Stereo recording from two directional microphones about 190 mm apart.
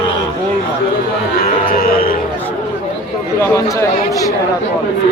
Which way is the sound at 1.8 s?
50° left (ahead or behind).